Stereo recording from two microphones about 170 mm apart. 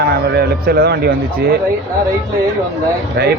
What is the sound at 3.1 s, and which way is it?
Speech, 70° right (ahead or behind).